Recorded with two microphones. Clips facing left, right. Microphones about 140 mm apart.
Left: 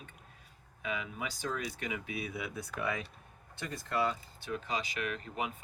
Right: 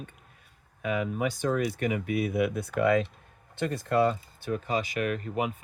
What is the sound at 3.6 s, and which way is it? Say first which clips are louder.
Speech: right 9 dB; 55° right (ahead or behind).